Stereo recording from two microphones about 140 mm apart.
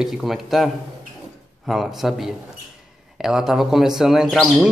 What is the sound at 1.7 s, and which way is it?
A man's voice, centre (ahead or behind).